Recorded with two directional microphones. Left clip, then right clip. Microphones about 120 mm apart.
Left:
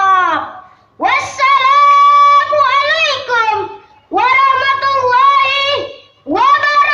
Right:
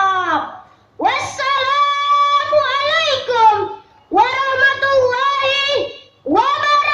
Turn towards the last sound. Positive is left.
turn(degrees=30)  # may be behind; listen again after turning